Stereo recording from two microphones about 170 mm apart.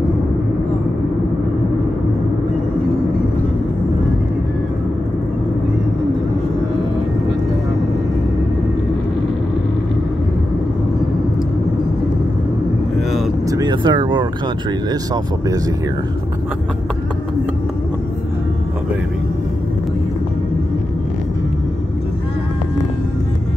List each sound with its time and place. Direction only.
12.9 s vehicle: centre (ahead or behind)
13.5 s vehicle: 25° right (ahead or behind)